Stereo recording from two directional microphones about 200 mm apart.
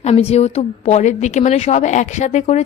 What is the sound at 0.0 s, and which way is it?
A woman's voice, 30° left (ahead or behind).